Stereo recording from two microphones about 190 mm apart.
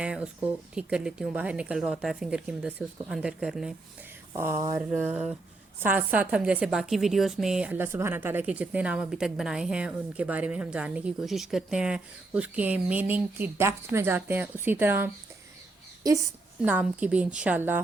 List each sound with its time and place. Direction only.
0.0 s speech: 5° right (ahead or behind)
4.4 s a woman's voice: 15° right (ahead or behind)
16.6 s a woman's voice: 10° right (ahead or behind)